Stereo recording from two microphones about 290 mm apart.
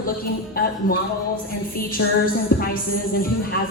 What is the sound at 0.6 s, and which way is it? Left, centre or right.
Speech, left.